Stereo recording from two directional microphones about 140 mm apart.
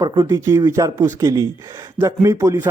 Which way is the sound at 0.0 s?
25° right (ahead or behind).